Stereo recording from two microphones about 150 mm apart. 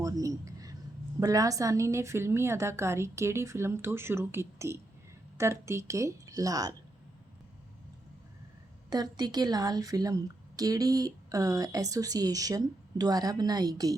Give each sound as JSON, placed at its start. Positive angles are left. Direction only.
{"t": 0.0, "sound": "a sound", "side_deg": -20}
{"t": 1.2, "sound": "a woman's voice", "side_deg": -25}
{"t": 8.9, "sound": "speech", "side_deg": -25}